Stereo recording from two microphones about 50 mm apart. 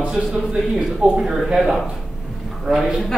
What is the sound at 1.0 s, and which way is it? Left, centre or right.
Speech, right.